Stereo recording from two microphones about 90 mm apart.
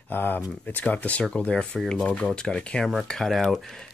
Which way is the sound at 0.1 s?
20° left (ahead or behind).